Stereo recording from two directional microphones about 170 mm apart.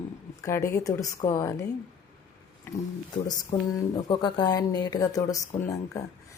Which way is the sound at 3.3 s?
25° left (ahead or behind).